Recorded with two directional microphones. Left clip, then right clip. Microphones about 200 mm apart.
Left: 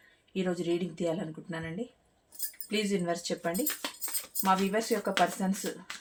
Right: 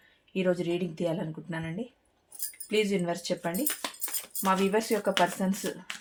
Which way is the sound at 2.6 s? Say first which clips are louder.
Right 3 dB; 40° right (ahead or behind).